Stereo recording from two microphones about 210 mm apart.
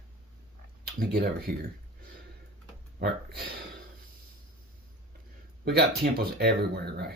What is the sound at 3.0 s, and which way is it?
Speech, 50° right (ahead or behind).